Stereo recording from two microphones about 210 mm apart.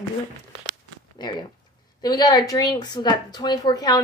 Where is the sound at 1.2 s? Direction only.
20° left (ahead or behind).